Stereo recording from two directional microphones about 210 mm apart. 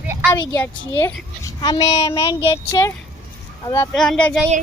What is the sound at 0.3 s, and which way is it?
Speech, 10° left (ahead or behind).